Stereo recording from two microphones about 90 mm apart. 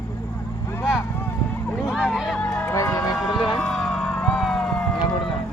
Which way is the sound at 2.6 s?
35° left (ahead or behind).